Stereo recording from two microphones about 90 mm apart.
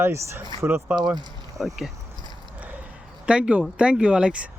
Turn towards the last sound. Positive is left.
turn(degrees=-10)  # may be behind; listen again after turning